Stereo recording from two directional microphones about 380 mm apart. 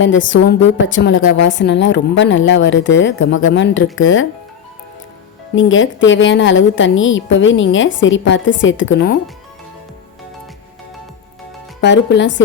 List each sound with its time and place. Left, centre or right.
0.0 s a woman's voice: left
5.5 s a woman's voice: left
11.8 s a woman's voice: left